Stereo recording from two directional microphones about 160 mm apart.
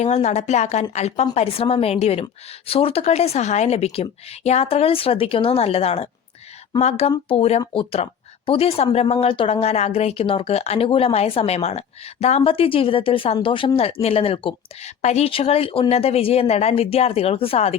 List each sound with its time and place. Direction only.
0.0 s a woman's voice: 45° left (ahead or behind)